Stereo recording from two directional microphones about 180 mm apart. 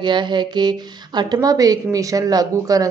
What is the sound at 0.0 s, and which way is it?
A woman's voice, 25° right (ahead or behind).